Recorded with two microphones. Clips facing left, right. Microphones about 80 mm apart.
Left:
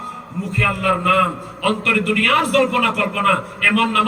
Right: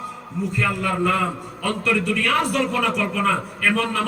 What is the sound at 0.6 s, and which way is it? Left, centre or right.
A man's voice, left.